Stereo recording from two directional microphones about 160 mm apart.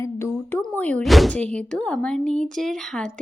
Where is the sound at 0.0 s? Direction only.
15° left (ahead or behind).